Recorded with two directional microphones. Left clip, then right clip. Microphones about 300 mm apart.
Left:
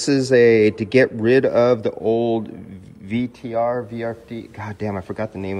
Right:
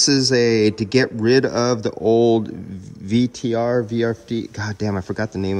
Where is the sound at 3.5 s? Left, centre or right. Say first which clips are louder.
Even; right.